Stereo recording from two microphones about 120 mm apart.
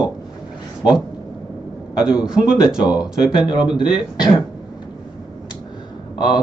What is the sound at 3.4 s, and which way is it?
Speech, 40° left (ahead or behind).